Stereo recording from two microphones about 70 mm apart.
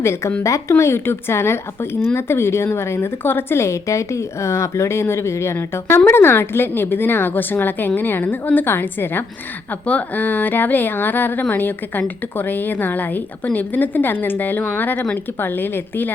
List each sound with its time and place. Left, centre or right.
0.0 s a woman's voice: left